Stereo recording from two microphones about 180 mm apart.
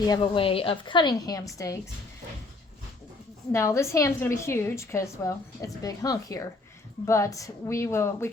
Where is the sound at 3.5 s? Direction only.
15° left (ahead or behind).